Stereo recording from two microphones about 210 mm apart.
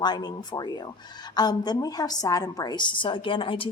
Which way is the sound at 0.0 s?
20° left (ahead or behind).